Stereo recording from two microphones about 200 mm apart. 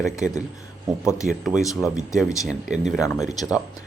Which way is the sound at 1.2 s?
Centre (ahead or behind).